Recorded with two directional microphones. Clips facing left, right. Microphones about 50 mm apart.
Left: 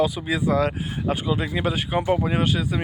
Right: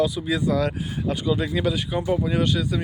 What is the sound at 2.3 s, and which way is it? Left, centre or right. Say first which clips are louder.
Speech: even; left.